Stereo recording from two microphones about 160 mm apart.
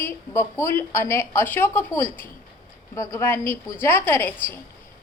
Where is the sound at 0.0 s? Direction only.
15° left (ahead or behind).